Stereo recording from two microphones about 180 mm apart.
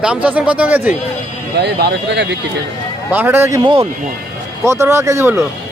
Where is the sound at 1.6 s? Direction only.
65° right (ahead or behind).